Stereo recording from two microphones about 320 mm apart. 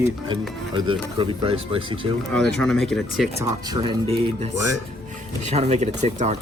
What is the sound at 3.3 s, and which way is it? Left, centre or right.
Speech, centre.